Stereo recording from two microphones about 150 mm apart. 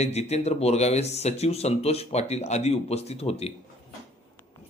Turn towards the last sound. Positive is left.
turn(degrees=45)  # may be behind; listen again after turning